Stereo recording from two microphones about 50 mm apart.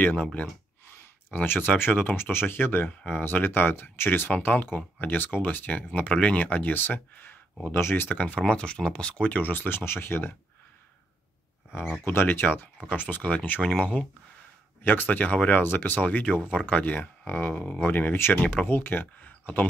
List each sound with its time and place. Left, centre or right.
0.2 s speech: left
1.3 s speech: left
4.5 s speech: left
5.9 s speech: left
8.1 s speech: left
12.1 s speech: left
13.6 s speech: centre
14.8 s speech: left
15.6 s speech: left
18.3 s speech: left
18.7 s speech: left